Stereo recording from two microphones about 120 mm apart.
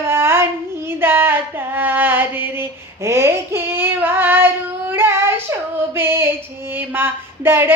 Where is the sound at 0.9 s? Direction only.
20° right (ahead or behind).